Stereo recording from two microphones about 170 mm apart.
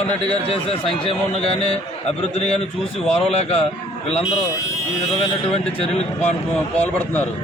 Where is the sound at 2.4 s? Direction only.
40° left (ahead or behind).